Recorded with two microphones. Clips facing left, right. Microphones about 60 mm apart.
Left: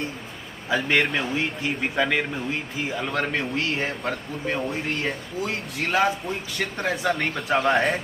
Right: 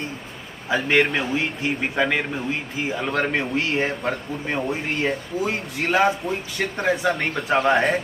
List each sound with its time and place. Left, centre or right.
0.7 s speech: centre